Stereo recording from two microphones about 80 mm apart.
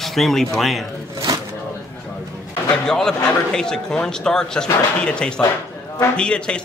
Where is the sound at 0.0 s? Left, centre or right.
Centre.